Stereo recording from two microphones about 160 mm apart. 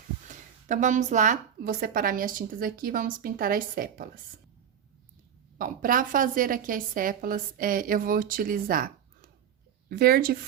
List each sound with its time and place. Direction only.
0.3 s a woman's voice: 50° right (ahead or behind)
5.5 s a woman's voice: 60° right (ahead or behind)
9.9 s speech: 65° right (ahead or behind)